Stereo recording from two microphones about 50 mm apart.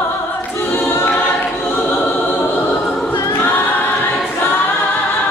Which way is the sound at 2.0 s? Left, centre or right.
Left.